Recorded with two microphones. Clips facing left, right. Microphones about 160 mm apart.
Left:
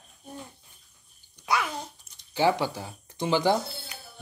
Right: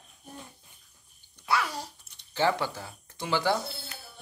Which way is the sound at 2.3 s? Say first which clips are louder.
Left 3 dB; 15° left (ahead or behind).